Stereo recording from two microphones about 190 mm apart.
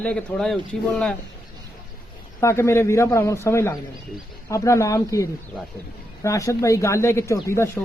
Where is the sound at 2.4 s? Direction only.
15° left (ahead or behind).